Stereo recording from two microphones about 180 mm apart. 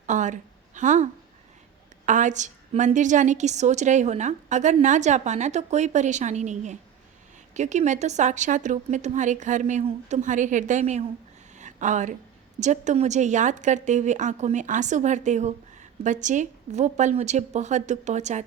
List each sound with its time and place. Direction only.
0.0 s a woman's voice: 45° right (ahead or behind)
11.5 s a sound: 45° right (ahead or behind)
12.5 s a woman's voice: 40° right (ahead or behind)